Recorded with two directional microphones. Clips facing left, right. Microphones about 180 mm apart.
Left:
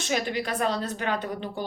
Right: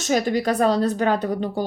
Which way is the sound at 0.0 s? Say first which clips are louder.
Right 7 dB; 40° right (ahead or behind).